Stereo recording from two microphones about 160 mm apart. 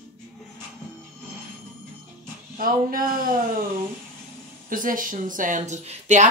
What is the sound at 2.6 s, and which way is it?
Speech, 60° right (ahead or behind).